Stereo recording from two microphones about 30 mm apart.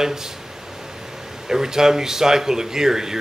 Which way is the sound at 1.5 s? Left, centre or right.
Centre.